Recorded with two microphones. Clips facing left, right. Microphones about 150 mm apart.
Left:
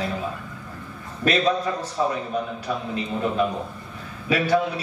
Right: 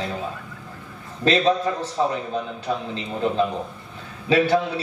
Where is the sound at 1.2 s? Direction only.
25° right (ahead or behind).